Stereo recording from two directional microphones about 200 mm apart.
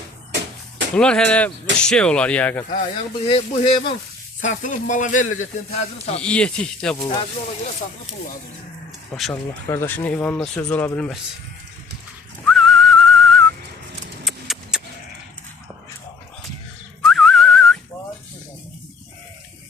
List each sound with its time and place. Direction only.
0.9 s speech: 5° left (ahead or behind)
3.2 s speech: 25° left (ahead or behind)
4.4 s speech: 40° left (ahead or behind)
6.2 s speech: 5° left (ahead or behind)
9.1 s speech: centre (ahead or behind)
12.5 s whistling: centre (ahead or behind)
14.3 s a sound: centre (ahead or behind)
17.0 s whistling: centre (ahead or behind)